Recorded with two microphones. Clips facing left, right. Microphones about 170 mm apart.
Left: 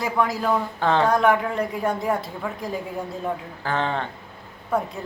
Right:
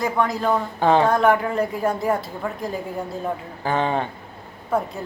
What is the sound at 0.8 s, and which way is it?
Speech, 15° right (ahead or behind).